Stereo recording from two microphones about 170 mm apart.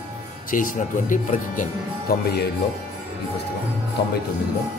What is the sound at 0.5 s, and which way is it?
Speech, 55° left (ahead or behind).